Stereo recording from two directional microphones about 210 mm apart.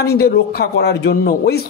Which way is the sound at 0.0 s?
50° left (ahead or behind).